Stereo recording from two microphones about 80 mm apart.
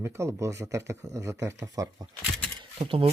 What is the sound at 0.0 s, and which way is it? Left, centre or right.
Speech, right.